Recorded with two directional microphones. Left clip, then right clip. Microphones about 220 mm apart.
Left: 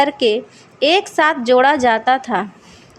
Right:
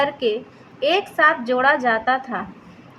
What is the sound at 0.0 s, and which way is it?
A woman's voice, 45° left (ahead or behind).